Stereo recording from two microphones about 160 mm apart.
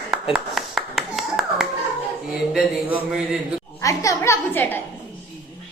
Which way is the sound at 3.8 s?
20° left (ahead or behind).